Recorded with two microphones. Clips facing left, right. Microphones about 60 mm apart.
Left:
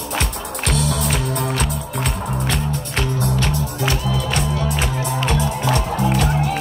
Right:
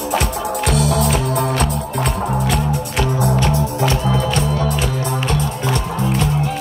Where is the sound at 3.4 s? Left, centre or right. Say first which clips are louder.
Right 4 dB; right.